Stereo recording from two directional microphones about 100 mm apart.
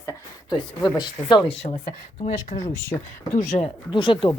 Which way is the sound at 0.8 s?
45° left (ahead or behind).